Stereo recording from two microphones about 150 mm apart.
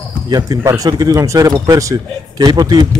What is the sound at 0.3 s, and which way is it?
Speech, 25° right (ahead or behind).